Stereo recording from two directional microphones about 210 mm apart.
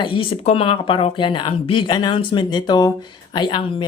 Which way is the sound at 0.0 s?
25° left (ahead or behind).